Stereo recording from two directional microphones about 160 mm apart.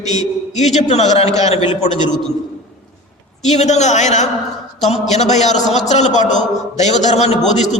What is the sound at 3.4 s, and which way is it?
A man's voice, 45° left (ahead or behind).